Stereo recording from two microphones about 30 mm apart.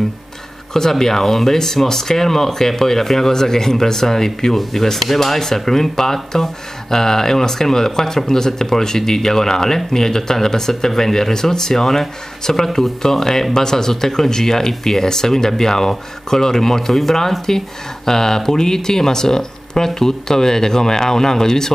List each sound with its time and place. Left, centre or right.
0.7 s speech: centre